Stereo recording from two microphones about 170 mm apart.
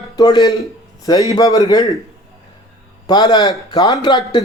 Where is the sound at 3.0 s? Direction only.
25° left (ahead or behind).